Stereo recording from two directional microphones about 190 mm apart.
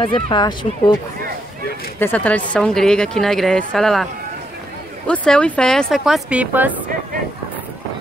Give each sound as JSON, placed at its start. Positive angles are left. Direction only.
{"t": 0.0, "sound": "speech", "side_deg": 25}
{"t": 2.0, "sound": "a woman's voice", "side_deg": 10}